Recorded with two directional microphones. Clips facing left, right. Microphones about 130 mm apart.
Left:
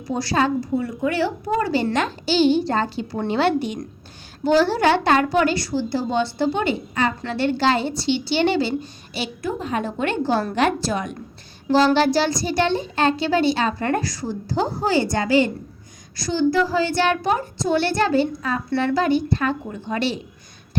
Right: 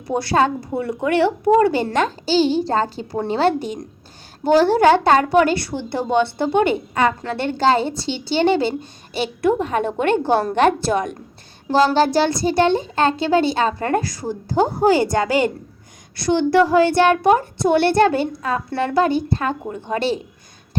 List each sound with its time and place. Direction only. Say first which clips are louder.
0.1 s a woman's voice: right 3 dB; 55° right (ahead or behind)
9.1 s a child's voice: right 8 dB; 60° right (ahead or behind)
16.2 s a child's voice: right 4 dB; 65° right (ahead or behind); by 20.1 s 45° right (ahead or behind)